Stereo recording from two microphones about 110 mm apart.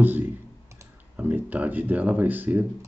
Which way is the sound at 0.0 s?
15° right (ahead or behind).